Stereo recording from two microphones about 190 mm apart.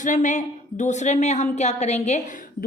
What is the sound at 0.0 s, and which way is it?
A woman's voice, 40° left (ahead or behind).